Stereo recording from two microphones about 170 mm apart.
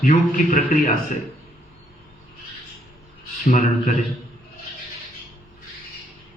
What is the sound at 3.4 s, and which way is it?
Speech, 50° left (ahead or behind).